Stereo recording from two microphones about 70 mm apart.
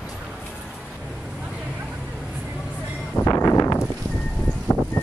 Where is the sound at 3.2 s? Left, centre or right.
Left.